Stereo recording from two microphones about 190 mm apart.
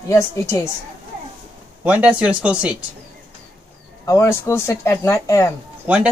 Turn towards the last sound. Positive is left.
turn(degrees=-10)  # may be behind; listen again after turning